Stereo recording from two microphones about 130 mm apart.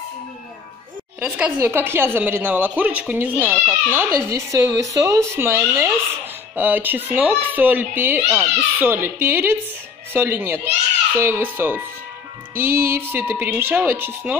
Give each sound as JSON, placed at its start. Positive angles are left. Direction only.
{"t": 1.2, "sound": "a woman's voice", "side_deg": -10}